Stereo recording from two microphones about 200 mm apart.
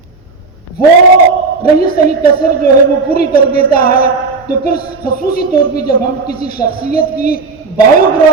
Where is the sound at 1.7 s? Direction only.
50° left (ahead or behind).